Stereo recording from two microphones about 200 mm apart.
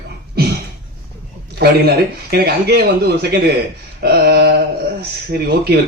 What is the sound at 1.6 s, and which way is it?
Speech, 50° right (ahead or behind).